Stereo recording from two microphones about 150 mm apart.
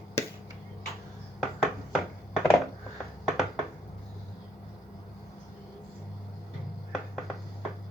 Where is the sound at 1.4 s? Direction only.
5° left (ahead or behind).